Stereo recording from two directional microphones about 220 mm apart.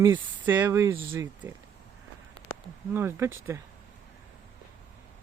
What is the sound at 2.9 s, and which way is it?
Speech, 10° right (ahead or behind).